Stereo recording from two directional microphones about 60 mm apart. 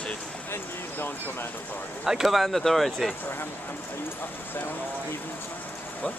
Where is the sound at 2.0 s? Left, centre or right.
Centre.